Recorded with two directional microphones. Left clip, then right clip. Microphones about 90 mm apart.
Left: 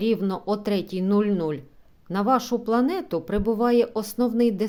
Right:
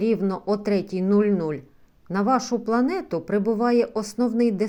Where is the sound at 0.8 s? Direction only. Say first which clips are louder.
Right 2 dB; 65° left (ahead or behind).